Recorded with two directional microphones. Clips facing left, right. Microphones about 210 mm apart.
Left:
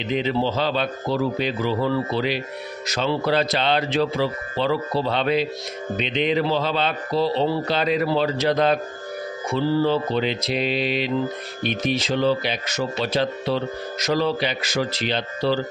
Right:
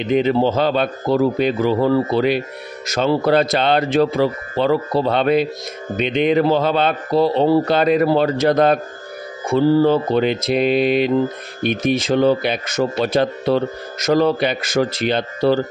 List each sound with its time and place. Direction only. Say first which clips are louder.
0.0 s speech: right 7 dB; 50° right (ahead or behind)